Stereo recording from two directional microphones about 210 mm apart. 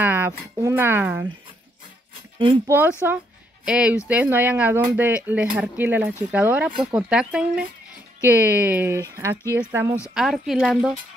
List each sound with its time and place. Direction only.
0.0 s speech: 10° right (ahead or behind)
2.3 s speech: 25° right (ahead or behind)
3.1 s speech: 10° right (ahead or behind)